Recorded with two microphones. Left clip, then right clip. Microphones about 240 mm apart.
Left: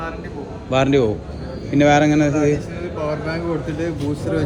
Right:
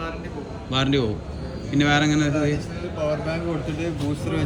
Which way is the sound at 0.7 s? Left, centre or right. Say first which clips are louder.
Left 7 dB; centre.